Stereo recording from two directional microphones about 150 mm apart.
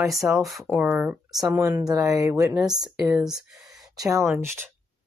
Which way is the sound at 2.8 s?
5° right (ahead or behind).